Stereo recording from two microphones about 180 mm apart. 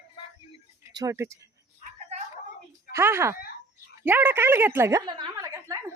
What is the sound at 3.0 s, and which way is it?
A woman's voice, 15° right (ahead or behind).